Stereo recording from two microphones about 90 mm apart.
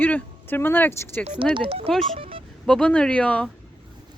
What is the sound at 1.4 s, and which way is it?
Speech, 70° right (ahead or behind).